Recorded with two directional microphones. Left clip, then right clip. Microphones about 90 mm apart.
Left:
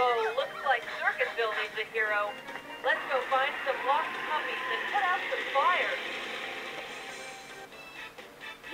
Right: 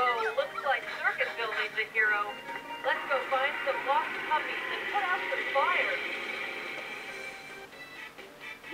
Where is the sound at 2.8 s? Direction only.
30° left (ahead or behind).